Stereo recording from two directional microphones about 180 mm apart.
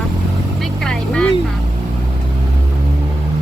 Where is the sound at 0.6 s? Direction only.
5° left (ahead or behind).